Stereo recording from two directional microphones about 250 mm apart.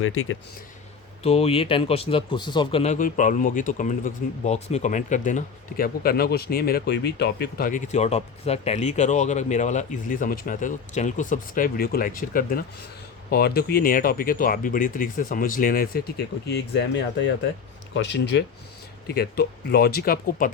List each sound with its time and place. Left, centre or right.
0.0 s speech: left
1.2 s speech: left